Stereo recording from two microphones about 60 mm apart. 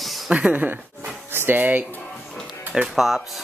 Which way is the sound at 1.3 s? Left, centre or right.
Right.